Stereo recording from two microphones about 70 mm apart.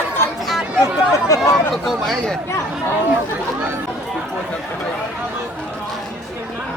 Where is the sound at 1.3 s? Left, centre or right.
Left.